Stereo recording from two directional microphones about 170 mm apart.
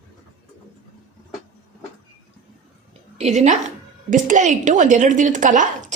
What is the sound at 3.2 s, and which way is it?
A woman's voice, 45° right (ahead or behind).